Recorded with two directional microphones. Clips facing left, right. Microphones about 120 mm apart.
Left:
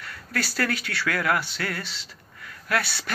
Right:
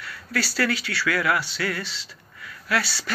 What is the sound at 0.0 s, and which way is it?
Speech, 50° left (ahead or behind).